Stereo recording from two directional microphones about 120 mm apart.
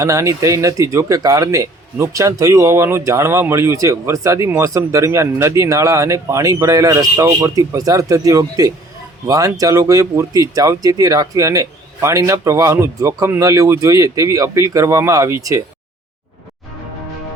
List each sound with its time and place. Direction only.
0.0 s speech: 25° right (ahead or behind)